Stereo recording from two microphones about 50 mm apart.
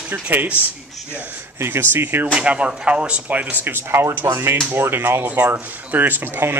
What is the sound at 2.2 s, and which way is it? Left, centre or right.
Speech, right.